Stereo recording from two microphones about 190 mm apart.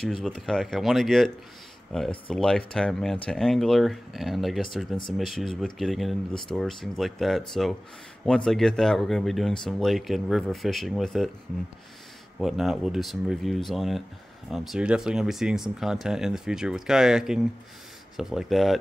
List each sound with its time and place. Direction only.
0.0 s speech: 5° left (ahead or behind)
12.4 s speech: centre (ahead or behind)